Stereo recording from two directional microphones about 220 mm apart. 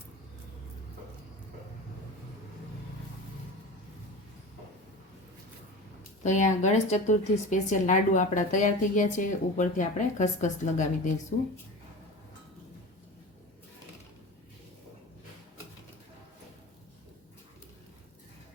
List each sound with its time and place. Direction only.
6.2 s a woman's voice: 35° left (ahead or behind)